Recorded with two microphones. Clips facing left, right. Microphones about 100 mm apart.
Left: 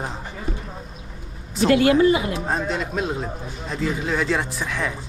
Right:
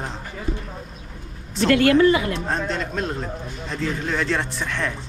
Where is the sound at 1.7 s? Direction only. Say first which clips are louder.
Even; 20° left (ahead or behind).